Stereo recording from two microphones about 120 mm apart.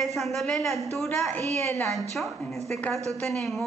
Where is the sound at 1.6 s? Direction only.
20° left (ahead or behind).